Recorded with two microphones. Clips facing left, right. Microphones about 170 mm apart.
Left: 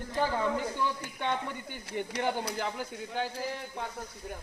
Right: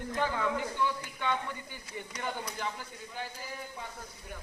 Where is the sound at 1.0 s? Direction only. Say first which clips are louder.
Left 1 dB; 50° left (ahead or behind); by 3.8 s 70° left (ahead or behind).